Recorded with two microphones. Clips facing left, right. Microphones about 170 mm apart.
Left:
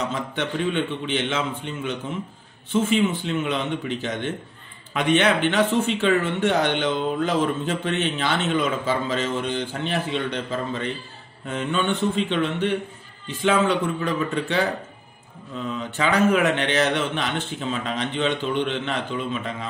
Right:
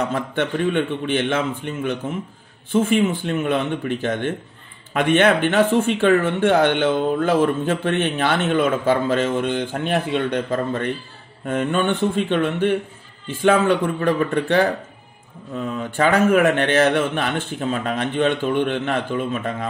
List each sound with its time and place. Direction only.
0.1 s a man's voice: 50° right (ahead or behind)
16.0 s speech: 50° right (ahead or behind)